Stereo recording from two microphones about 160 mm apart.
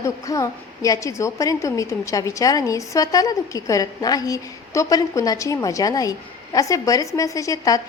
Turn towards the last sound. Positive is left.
turn(degrees=20)  # may be behind; listen again after turning